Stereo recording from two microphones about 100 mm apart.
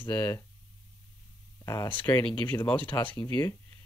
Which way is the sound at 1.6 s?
30° left (ahead or behind).